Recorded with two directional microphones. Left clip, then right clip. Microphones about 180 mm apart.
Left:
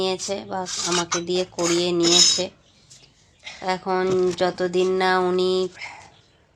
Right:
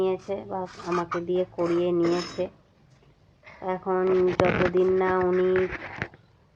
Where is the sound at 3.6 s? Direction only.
25° left (ahead or behind).